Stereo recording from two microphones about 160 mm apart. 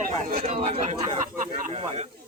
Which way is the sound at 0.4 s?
40° right (ahead or behind).